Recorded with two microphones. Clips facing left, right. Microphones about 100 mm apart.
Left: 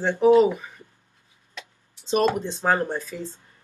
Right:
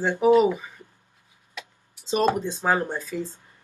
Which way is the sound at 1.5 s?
15° right (ahead or behind).